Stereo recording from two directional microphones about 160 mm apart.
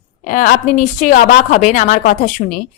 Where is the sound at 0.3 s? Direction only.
55° left (ahead or behind).